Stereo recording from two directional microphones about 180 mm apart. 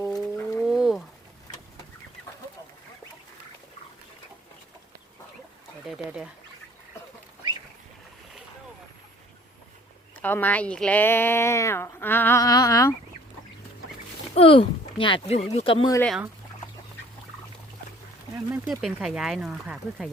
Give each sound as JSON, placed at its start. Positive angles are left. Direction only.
{"t": 0.1, "sound": "wild animals", "side_deg": 0}
{"t": 5.9, "sound": "speech", "side_deg": -5}
{"t": 10.2, "sound": "speech", "side_deg": 10}
{"t": 14.3, "sound": "speech", "side_deg": 30}
{"t": 18.5, "sound": "speech", "side_deg": 0}